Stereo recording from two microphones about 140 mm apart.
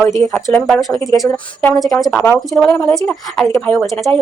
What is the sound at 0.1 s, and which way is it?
Speech, 20° left (ahead or behind).